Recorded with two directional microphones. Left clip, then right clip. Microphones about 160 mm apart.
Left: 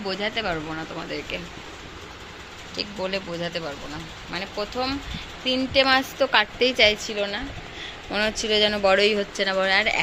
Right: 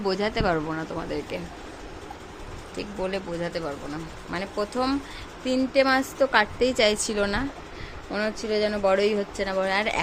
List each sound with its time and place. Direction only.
0.1 s speech: 35° right (ahead or behind)
0.7 s speech: 25° right (ahead or behind)
2.7 s speech: 20° right (ahead or behind)
4.3 s speech: 40° right (ahead or behind)
5.5 s speech: 20° right (ahead or behind)
7.0 s a woman's voice: 45° right (ahead or behind)
8.1 s speech: 10° right (ahead or behind)